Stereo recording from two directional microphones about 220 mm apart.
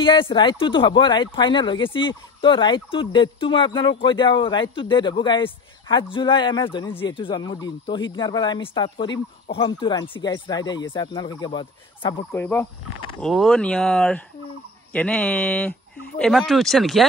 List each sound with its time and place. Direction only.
0.0 s speech: 20° left (ahead or behind)
12.4 s speech: 10° left (ahead or behind)